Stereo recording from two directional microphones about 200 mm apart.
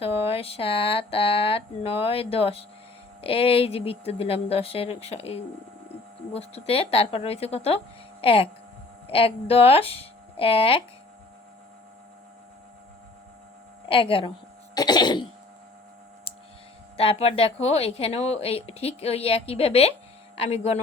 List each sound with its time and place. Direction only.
0.0 s a woman's voice: 30° left (ahead or behind)
13.8 s a woman's voice: 25° left (ahead or behind)
17.0 s a woman's voice: 30° left (ahead or behind)